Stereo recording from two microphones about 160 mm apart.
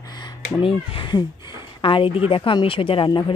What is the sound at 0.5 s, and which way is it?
Speech, 35° left (ahead or behind).